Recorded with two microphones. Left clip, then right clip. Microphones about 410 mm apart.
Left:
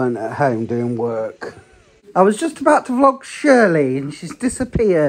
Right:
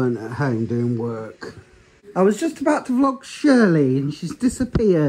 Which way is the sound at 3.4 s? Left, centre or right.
Centre.